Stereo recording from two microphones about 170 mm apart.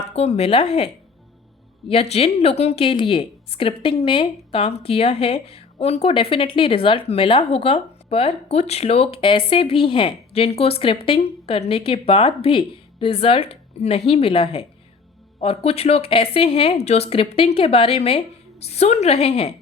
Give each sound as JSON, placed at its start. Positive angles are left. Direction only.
{"t": 0.1, "sound": "speech", "side_deg": 40}
{"t": 1.9, "sound": "speech", "side_deg": 35}